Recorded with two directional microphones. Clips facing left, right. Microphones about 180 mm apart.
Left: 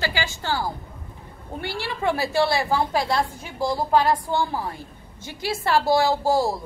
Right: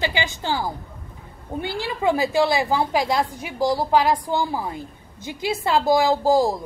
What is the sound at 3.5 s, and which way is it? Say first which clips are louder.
Speech: right 4 dB; 40° right (ahead or behind).